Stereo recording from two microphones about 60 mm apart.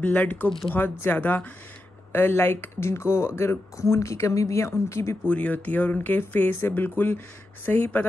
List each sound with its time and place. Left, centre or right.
0.0 s speech: left
5.2 s speech: left